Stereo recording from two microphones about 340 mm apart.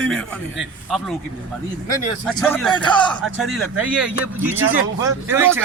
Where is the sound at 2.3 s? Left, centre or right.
Centre.